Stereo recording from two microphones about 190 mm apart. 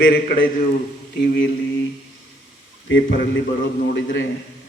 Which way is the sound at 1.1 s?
60° left (ahead or behind).